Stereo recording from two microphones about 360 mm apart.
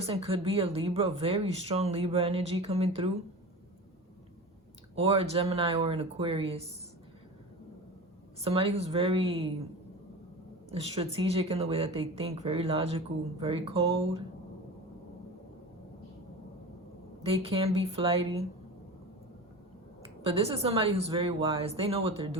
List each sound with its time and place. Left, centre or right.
0.0 s speech: centre
4.9 s speech: centre
8.4 s speech: centre
11.0 s speech: centre
17.4 s speech: centre
20.2 s speech: centre